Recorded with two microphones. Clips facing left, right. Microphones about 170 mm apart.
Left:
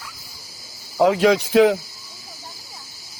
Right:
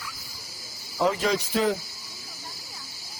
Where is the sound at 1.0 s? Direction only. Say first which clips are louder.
Left 8 dB; 75° left (ahead or behind).